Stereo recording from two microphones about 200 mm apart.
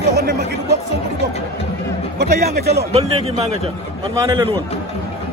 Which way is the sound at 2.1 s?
50° right (ahead or behind).